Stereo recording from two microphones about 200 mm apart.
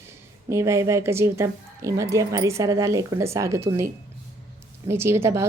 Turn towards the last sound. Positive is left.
turn(degrees=-15)  # may be behind; listen again after turning